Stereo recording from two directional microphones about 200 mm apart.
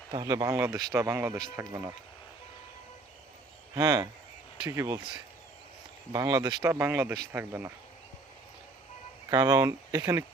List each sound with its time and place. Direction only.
0.1 s speech: 20° right (ahead or behind)
3.8 s speech: 20° right (ahead or behind)
9.3 s speech: 15° right (ahead or behind)